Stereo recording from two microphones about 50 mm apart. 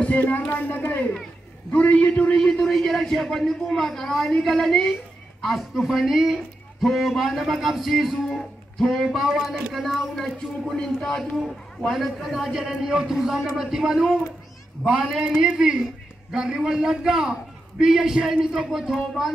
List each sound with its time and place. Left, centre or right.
0.0 s a man's voice: left
2.6 s a man's voice: centre
11.4 s a man's voice: centre